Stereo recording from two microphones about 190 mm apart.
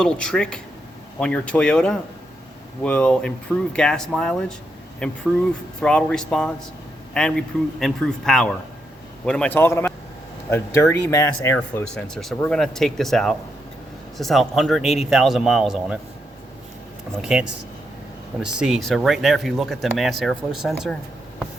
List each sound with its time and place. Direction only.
0.0 s a man's voice: 5° left (ahead or behind)
17.2 s speech: 5° right (ahead or behind)
18.4 s speech: 5° right (ahead or behind)